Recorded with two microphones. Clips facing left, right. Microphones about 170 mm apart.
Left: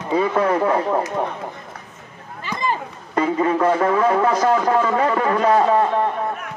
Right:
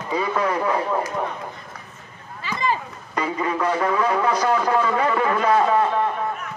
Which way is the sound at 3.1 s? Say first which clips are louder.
Left 6 dB; 50° left (ahead or behind).